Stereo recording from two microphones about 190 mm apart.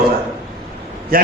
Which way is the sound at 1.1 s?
50° right (ahead or behind).